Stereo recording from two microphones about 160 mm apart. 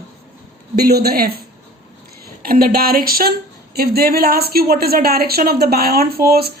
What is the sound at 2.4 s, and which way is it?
Speech, 70° right (ahead or behind).